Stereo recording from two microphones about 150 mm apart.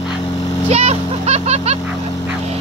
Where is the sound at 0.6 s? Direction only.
45° right (ahead or behind).